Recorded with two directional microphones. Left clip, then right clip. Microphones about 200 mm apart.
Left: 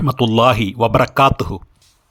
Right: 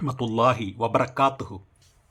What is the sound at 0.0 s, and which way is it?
Speech, 25° left (ahead or behind).